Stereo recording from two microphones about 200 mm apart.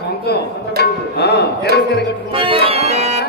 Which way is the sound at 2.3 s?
25° right (ahead or behind).